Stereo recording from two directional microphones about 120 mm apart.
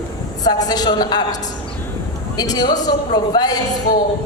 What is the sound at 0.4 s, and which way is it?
Speech, 30° left (ahead or behind).